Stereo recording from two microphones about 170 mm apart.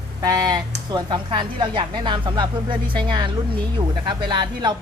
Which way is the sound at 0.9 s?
25° right (ahead or behind).